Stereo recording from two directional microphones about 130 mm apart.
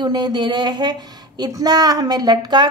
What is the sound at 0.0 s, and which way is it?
A woman's voice, 35° right (ahead or behind).